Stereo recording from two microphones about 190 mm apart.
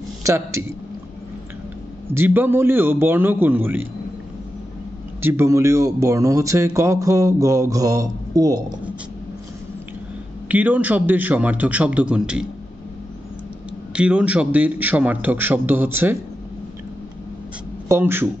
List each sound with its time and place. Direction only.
0.2 s speech: 15° right (ahead or behind)
2.1 s speech: 10° right (ahead or behind)
5.2 s speech: 10° right (ahead or behind)
10.5 s speech: 10° right (ahead or behind)
13.9 s speech: 5° right (ahead or behind)
17.8 s speech: 15° right (ahead or behind)